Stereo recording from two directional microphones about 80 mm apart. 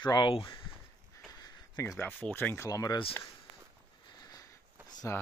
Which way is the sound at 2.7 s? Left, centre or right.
Left.